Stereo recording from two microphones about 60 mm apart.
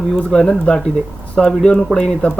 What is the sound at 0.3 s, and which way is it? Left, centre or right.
Speech, centre.